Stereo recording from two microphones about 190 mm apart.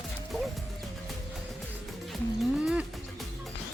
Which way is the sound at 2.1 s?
Centre (ahead or behind).